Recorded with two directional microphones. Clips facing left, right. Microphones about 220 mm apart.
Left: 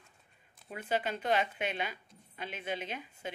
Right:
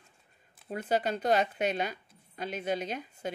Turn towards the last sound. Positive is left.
turn(degrees=-40)  # may be behind; listen again after turning